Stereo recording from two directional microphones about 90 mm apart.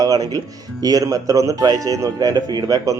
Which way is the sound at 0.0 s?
45° right (ahead or behind).